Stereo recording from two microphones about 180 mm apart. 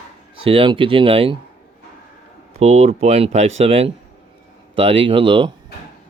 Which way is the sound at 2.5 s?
35° right (ahead or behind).